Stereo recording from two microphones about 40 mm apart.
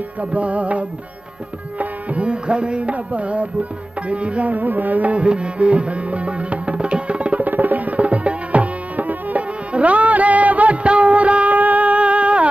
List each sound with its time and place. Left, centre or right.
0.2 s music: right
7.4 s music: right